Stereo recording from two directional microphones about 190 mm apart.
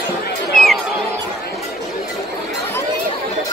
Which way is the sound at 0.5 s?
Centre (ahead or behind).